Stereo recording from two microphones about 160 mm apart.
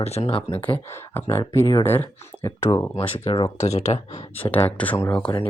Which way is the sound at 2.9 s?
40° left (ahead or behind).